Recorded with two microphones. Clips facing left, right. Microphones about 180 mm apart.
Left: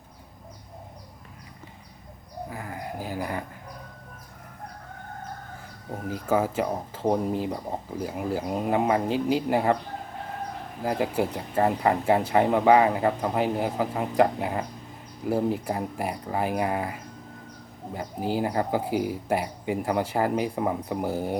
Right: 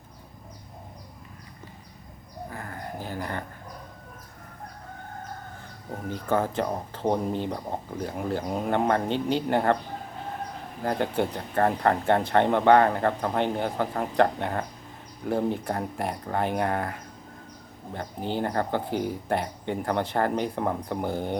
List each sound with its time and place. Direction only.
2.5 s a sound: 10° left (ahead or behind)
6.1 s speech: 5° left (ahead or behind)
10.8 s speech: 5° left (ahead or behind)